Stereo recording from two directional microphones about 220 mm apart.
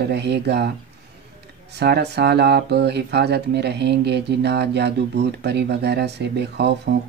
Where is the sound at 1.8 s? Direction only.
50° right (ahead or behind).